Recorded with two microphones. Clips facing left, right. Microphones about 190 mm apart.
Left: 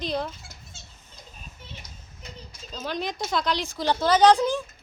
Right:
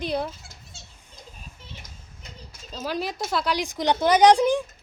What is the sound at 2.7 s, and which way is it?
A woman's voice, 5° right (ahead or behind).